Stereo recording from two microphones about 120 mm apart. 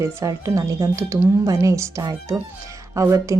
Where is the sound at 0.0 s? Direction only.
25° right (ahead or behind).